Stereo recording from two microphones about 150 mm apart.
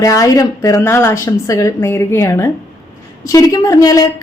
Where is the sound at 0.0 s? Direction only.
25° left (ahead or behind).